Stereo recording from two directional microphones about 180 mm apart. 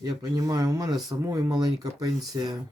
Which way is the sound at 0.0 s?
20° right (ahead or behind).